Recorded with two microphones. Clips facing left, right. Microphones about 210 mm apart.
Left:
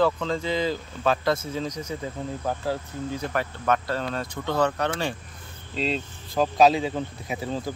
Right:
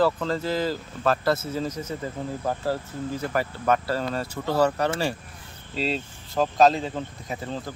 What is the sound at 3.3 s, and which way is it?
Speech, 5° right (ahead or behind).